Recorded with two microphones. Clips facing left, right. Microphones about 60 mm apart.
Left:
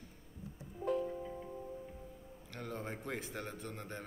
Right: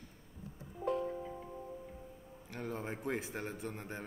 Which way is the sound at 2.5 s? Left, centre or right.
Centre.